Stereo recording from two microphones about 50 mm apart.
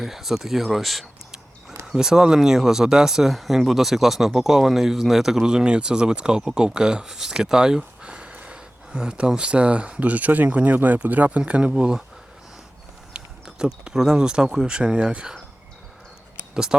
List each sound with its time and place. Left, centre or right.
0.0 s speech: centre
8.0 s speech: right
13.1 s speech: centre